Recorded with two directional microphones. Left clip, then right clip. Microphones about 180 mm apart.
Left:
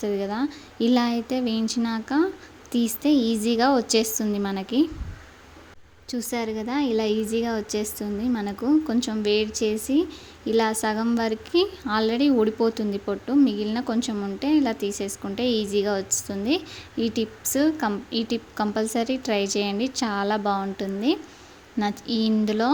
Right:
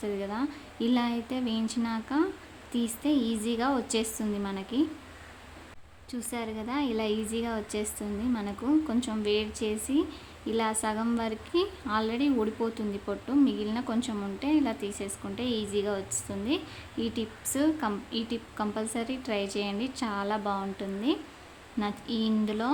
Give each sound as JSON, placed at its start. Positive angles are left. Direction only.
{"t": 0.0, "sound": "a woman's voice", "side_deg": 25}
{"t": 6.1, "sound": "speech", "side_deg": 5}
{"t": 6.3, "sound": "a woman's voice", "side_deg": 25}